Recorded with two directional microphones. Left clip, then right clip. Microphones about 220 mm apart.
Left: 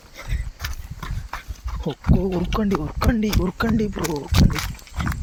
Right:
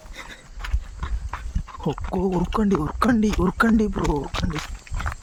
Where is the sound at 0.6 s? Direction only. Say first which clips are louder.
Left 2 dB; 40° left (ahead or behind).